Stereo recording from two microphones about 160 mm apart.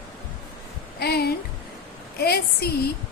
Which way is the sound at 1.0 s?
85° left.